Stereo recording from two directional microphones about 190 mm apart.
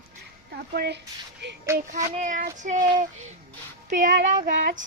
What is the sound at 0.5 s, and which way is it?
Speech, 55° right (ahead or behind).